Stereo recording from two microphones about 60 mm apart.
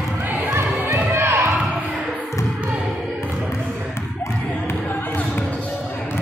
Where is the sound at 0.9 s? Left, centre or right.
Right.